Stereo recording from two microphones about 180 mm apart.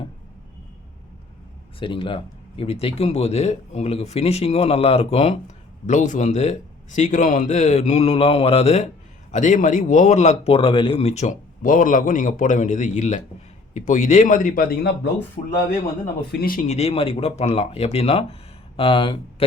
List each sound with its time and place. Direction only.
1.8 s speech: 30° left (ahead or behind); by 15.1 s 60° left (ahead or behind)
16.3 s speech: 55° left (ahead or behind); by 19.5 s 30° left (ahead or behind)